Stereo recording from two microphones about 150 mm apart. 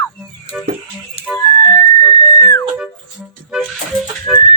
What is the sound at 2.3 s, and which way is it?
Whistle, 20° left (ahead or behind).